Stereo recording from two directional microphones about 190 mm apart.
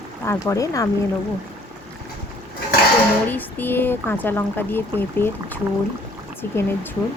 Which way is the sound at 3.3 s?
10° left (ahead or behind).